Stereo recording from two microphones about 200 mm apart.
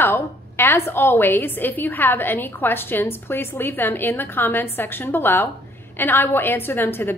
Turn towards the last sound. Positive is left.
turn(degrees=10)  # may be behind; listen again after turning